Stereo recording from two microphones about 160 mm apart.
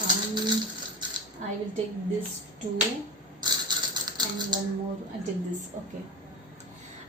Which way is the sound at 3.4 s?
25° right (ahead or behind).